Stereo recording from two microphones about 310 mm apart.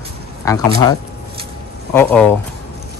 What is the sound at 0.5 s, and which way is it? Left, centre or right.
Speech, centre.